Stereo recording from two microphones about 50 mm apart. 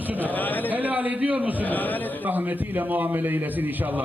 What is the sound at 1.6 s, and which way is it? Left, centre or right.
Speech, left.